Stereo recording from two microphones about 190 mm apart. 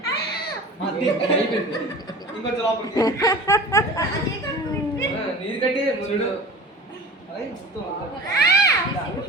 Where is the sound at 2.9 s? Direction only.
20° left (ahead or behind).